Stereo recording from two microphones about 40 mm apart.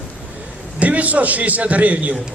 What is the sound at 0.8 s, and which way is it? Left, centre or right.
A man's voice, right.